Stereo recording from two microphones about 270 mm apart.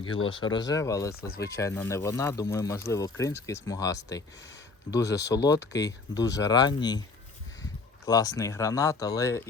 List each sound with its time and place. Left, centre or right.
0.0 s speech: centre
8.0 s speech: centre